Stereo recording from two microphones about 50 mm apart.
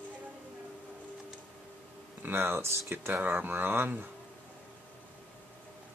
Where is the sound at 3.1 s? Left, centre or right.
Right.